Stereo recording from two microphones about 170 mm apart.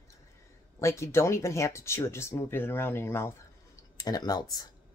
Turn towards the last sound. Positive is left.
turn(degrees=25)  # may be behind; listen again after turning